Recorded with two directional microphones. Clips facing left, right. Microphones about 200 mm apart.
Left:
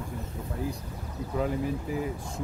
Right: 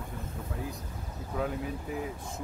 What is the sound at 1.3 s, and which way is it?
Speech, centre (ahead or behind).